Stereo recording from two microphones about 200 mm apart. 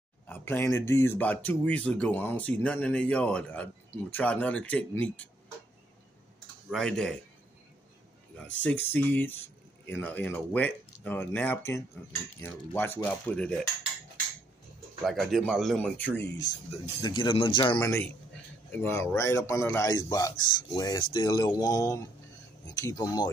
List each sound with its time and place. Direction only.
0.3 s speech: 10° left (ahead or behind)
6.7 s speech: 5° left (ahead or behind)
8.5 s speech: 10° left (ahead or behind)
15.0 s speech: centre (ahead or behind)
17.0 s speech: 25° left (ahead or behind)